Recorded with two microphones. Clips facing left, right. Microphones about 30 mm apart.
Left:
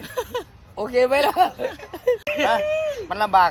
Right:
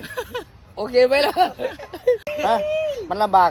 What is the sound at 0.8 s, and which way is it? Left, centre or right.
Speech, right.